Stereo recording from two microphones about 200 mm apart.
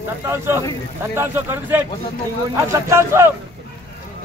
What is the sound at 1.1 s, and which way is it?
Speech, 10° right (ahead or behind).